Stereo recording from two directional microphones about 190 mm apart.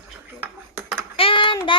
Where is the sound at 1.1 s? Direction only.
30° left (ahead or behind).